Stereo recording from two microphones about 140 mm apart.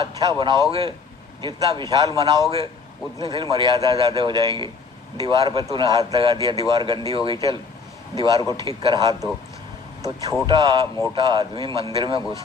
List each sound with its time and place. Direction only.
0.2 s speech: 30° right (ahead or behind)
0.7 s a man's voice: 40° right (ahead or behind)